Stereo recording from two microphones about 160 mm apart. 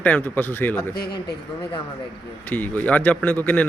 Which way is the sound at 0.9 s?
75° left (ahead or behind).